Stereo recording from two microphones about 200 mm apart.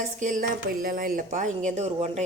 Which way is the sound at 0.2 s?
40° right (ahead or behind).